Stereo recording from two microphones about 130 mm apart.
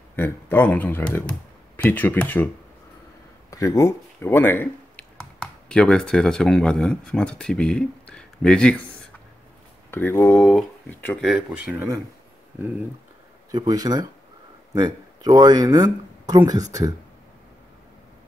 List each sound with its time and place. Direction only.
0.1 s speech: 15° left (ahead or behind)
3.4 s speech: 25° left (ahead or behind); by 8.8 s 5° left (ahead or behind)
9.8 s speech: 20° left (ahead or behind)
11.5 s speech: 10° right (ahead or behind)
13.5 s speech: 30° right (ahead or behind)